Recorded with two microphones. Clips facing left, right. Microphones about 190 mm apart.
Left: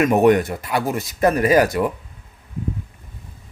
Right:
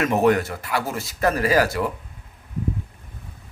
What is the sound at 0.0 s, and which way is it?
Speech, 15° left (ahead or behind).